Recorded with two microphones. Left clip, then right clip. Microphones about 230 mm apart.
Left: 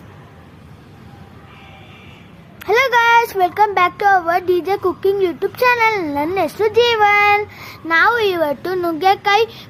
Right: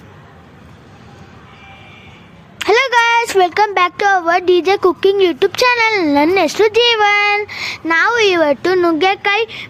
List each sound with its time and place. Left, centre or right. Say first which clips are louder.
2.6 s a child's voice: right 2 dB; right